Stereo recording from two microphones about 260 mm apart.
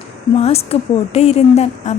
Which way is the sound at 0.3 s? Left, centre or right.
Left.